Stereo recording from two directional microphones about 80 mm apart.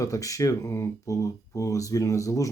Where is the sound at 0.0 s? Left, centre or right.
Left.